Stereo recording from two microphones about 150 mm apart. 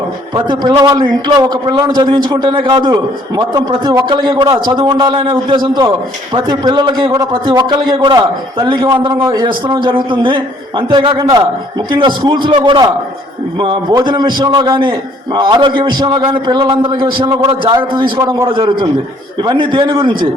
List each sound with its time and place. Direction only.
0.3 s a man's voice: 30° right (ahead or behind)